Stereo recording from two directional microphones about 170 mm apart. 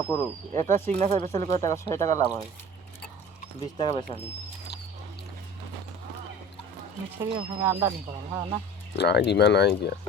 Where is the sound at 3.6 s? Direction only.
25° left (ahead or behind).